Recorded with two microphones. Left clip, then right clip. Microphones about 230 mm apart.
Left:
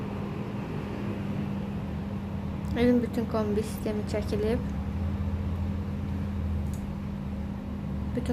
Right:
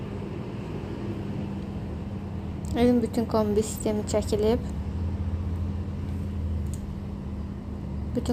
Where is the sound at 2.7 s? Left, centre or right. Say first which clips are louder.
Right 2 dB; centre.